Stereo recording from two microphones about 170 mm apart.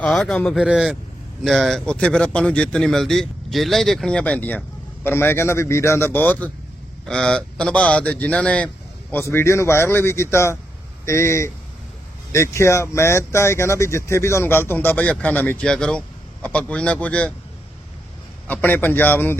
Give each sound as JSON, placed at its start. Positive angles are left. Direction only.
{"t": 0.0, "sound": "speech", "side_deg": 0}
{"t": 18.4, "sound": "speech", "side_deg": 10}